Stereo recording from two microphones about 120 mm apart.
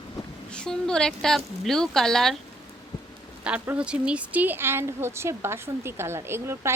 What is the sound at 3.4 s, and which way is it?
Speech, 10° right (ahead or behind).